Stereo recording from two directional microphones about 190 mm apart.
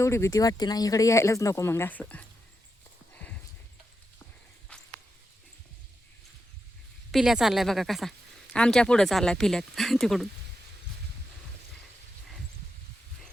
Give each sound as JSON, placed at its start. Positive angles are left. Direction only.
{"t": 0.0, "sound": "speech", "side_deg": 15}
{"t": 7.1, "sound": "speech", "side_deg": 0}